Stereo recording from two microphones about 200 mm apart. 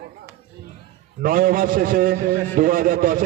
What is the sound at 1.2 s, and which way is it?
A man's voice, 45° right (ahead or behind).